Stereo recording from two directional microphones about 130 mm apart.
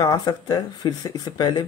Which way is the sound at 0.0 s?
30° left (ahead or behind).